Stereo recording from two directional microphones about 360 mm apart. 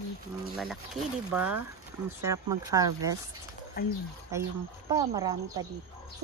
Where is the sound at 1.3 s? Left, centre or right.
Centre.